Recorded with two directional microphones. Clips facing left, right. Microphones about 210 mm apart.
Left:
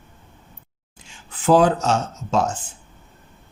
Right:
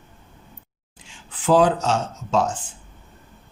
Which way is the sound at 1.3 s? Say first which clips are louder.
Left 1 dB; 45° left (ahead or behind).